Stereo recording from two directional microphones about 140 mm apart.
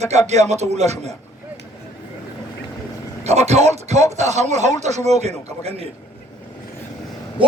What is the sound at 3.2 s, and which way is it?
A man's voice, 50° right (ahead or behind).